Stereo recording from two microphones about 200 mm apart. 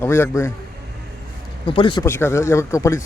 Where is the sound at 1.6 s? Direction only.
25° left (ahead or behind).